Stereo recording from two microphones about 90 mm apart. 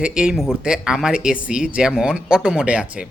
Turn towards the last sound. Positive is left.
turn(degrees=-10)  # may be behind; listen again after turning